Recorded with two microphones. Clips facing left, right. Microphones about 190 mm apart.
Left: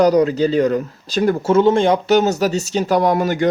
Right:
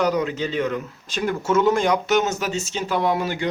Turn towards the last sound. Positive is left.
turn(degrees=45)  # may be behind; listen again after turning